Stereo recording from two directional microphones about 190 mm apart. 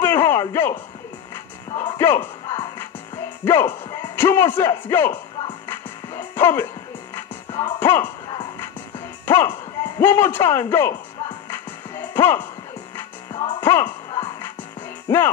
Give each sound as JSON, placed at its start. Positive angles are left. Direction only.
{"t": 0.0, "sound": "music", "side_deg": 10}
{"t": 1.7, "sound": "a man's voice", "side_deg": 20}
{"t": 5.7, "sound": "music", "side_deg": 10}
{"t": 7.5, "sound": "music", "side_deg": 25}
{"t": 9.2, "sound": "a man's voice", "side_deg": 10}
{"t": 11.9, "sound": "music", "side_deg": 10}
{"t": 13.3, "sound": "music", "side_deg": 25}
{"t": 13.6, "sound": "music", "side_deg": 10}